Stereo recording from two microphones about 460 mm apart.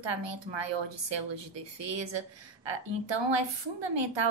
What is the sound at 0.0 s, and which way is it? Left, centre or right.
A woman's voice, right.